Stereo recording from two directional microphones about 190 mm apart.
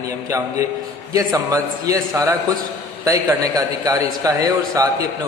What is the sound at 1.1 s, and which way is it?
A man's voice, 20° right (ahead or behind).